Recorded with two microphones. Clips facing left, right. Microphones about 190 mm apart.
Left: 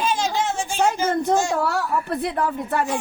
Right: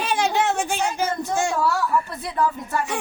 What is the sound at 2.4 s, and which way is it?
Speech, 60° left (ahead or behind).